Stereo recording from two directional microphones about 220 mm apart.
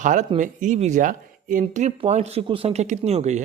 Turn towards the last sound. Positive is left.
turn(degrees=-30)  # may be behind; listen again after turning